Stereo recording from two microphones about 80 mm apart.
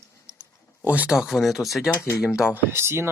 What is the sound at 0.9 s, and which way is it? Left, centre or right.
Speech, centre.